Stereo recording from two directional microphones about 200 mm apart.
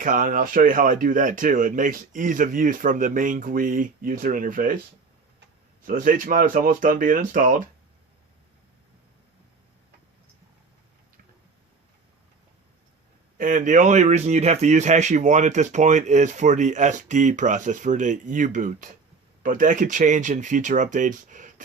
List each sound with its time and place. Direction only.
0.0 s speech: 40° right (ahead or behind)
5.8 s speech: 40° right (ahead or behind)
13.3 s speech: 40° right (ahead or behind)